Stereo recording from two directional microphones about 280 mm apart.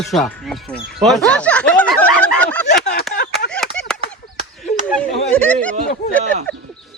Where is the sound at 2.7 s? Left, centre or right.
Left.